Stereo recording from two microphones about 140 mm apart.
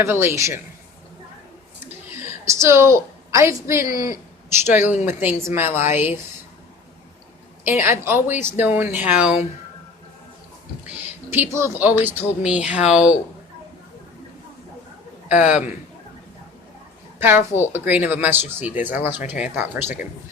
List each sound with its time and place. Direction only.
0.0 s a man's voice: 20° right (ahead or behind)
2.6 s a woman's voice: 20° right (ahead or behind)
7.6 s speech: 15° right (ahead or behind)
11.3 s speech: 15° right (ahead or behind)
15.3 s speech: 10° right (ahead or behind)
17.2 s speech: 15° right (ahead or behind)